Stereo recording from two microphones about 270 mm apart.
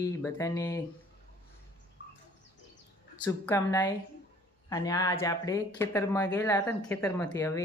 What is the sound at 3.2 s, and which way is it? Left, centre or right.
Speech, centre.